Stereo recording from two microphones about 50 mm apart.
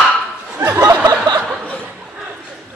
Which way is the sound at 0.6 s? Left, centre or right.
Right.